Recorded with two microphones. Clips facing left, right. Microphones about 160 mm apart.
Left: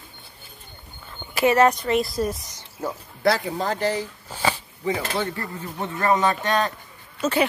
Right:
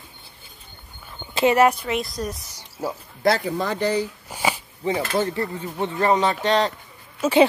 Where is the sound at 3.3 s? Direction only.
60° right (ahead or behind).